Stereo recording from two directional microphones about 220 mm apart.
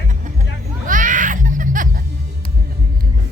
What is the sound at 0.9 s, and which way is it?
Music, 35° right (ahead or behind).